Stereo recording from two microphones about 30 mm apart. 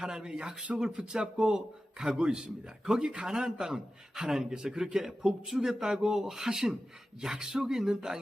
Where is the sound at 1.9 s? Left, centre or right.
Right.